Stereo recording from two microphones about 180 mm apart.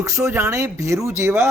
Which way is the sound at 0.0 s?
15° right (ahead or behind).